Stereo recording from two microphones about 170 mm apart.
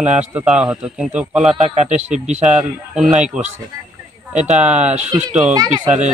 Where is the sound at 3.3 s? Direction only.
40° right (ahead or behind).